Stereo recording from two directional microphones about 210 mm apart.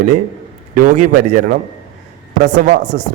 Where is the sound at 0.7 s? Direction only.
35° right (ahead or behind).